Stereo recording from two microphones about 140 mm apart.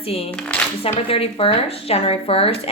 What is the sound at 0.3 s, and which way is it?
Speech, 10° left (ahead or behind).